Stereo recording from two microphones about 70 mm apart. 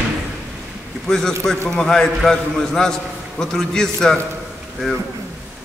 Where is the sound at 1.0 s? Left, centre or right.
Centre.